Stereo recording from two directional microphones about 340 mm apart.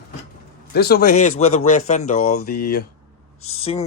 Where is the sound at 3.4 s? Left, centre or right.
Left.